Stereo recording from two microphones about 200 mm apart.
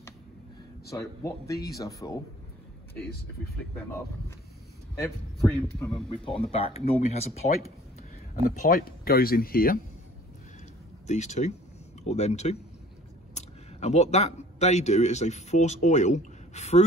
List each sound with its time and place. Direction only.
0.8 s speech: 15° left (ahead or behind)
1.4 s speech: 50° left (ahead or behind)
1.8 s speech: 15° left (ahead or behind)
5.4 s a man's voice: centre (ahead or behind)
6.0 s speech: 30° left (ahead or behind)
8.5 s speech: 45° left (ahead or behind)
11.1 s speech: 35° left (ahead or behind)